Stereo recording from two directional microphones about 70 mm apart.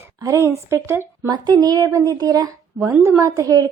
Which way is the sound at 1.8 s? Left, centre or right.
Right.